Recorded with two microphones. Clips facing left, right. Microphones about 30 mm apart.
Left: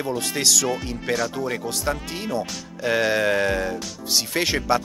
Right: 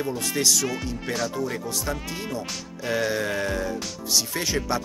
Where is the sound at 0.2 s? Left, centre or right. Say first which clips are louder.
Left 1 dB; left.